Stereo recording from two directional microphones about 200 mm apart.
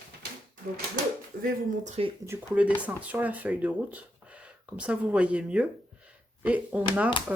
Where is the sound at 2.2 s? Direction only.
10° right (ahead or behind).